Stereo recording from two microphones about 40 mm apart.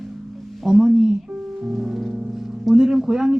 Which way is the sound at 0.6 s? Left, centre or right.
Centre.